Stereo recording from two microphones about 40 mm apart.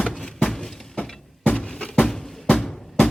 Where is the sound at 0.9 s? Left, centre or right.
Centre.